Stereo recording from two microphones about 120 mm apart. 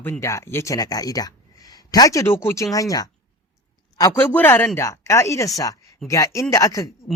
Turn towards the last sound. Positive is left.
turn(degrees=25)  # may be behind; listen again after turning